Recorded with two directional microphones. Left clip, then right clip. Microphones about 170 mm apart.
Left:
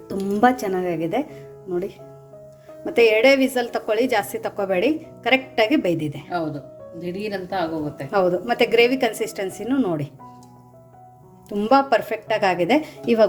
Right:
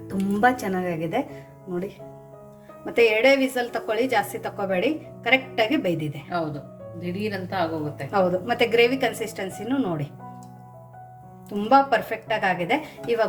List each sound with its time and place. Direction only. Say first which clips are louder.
0.4 s a woman's voice: left 3 dB; 40° left (ahead or behind)
6.2 s a woman's voice: left 2 dB; 15° left (ahead or behind)
8.1 s a woman's voice: left 2 dB; 45° left (ahead or behind)
11.4 s a woman's voice: left 1 dB; 40° left (ahead or behind)